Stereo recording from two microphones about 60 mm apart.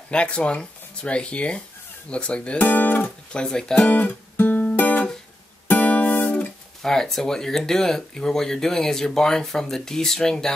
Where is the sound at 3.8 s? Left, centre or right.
Left.